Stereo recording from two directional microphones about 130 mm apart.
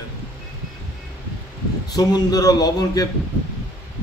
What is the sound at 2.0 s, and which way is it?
A man's voice, 30° left (ahead or behind).